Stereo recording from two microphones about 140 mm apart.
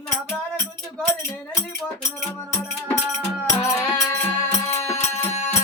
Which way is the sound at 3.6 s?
20° left (ahead or behind).